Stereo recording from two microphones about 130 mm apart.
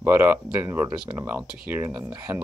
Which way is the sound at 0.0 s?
15° right (ahead or behind).